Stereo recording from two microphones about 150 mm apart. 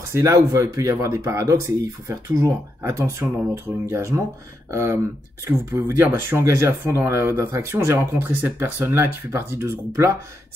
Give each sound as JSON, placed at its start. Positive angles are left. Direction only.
{"t": 0.1, "sound": "speech", "side_deg": -20}